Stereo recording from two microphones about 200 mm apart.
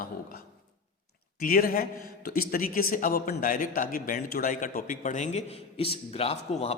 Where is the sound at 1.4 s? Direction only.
45° left (ahead or behind).